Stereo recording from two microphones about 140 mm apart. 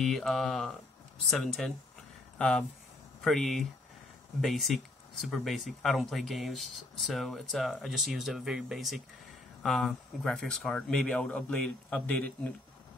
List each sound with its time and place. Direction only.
0.0 s a man's voice: centre (ahead or behind)